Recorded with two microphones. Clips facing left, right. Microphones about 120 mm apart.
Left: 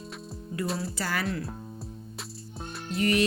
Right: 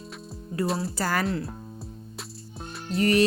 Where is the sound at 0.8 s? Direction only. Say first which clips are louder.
Right 4 dB; 40° right (ahead or behind).